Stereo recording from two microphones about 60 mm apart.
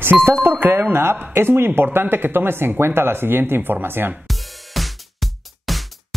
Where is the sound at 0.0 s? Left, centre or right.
Right.